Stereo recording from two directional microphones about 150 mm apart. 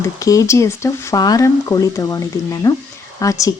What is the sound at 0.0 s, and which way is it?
Speech, 20° left (ahead or behind).